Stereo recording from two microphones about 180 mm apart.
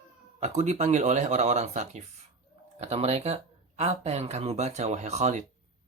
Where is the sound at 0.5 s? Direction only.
40° right (ahead or behind).